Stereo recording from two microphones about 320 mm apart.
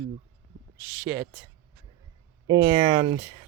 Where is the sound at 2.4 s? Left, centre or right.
Centre.